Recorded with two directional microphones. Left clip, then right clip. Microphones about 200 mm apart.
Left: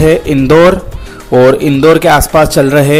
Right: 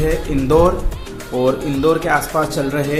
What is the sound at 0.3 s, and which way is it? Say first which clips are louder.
Speech: left 10 dB; 40° left (ahead or behind).